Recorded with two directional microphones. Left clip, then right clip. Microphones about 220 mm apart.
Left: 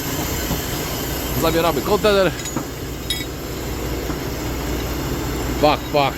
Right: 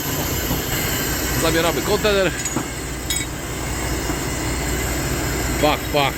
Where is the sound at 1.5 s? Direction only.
20° left (ahead or behind).